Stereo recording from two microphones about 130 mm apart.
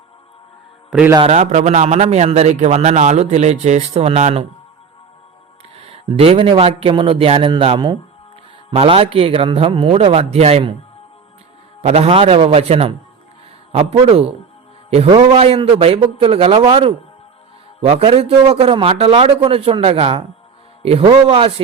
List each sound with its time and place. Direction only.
0.9 s a man's voice: 5° right (ahead or behind)
1.2 s a man's voice: 60° right (ahead or behind)
5.7 s a man's voice: 50° right (ahead or behind)
8.7 s a man's voice: 50° right (ahead or behind)
11.8 s a man's voice: 55° right (ahead or behind)
17.8 s a man's voice: 55° right (ahead or behind)